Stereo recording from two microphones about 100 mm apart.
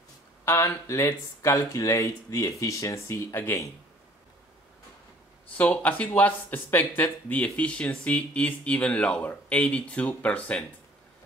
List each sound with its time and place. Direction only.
0.5 s speech: 30° left (ahead or behind)
5.6 s speech: 15° left (ahead or behind)